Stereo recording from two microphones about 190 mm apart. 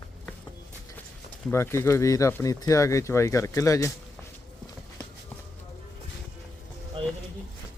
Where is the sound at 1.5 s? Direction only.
15° left (ahead or behind).